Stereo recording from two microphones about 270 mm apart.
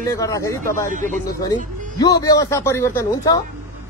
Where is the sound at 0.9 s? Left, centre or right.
Right.